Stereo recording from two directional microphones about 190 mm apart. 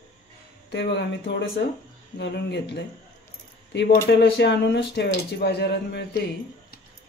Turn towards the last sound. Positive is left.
turn(degrees=60)  # may be behind; listen again after turning